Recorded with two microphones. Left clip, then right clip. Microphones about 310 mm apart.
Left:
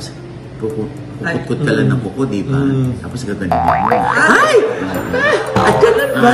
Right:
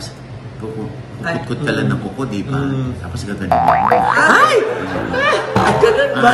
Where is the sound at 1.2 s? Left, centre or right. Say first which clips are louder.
Left 2 dB; centre.